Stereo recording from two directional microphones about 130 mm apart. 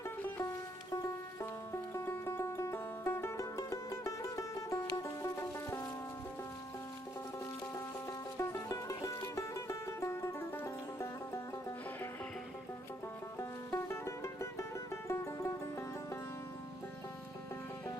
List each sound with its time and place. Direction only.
0.2 s music: 15° left (ahead or behind)
8.4 s music: 25° left (ahead or behind)
13.4 s music: 20° left (ahead or behind)